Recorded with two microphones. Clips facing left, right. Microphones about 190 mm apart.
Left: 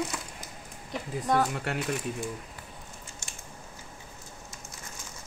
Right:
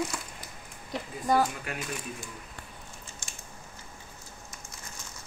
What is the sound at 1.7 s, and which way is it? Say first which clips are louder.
Speech: left 5 dB; 65° left (ahead or behind).